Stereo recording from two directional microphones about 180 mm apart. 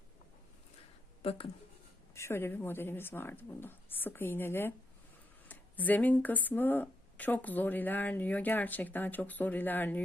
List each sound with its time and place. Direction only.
1.2 s speech: 30° left (ahead or behind)
2.1 s speech: 15° left (ahead or behind)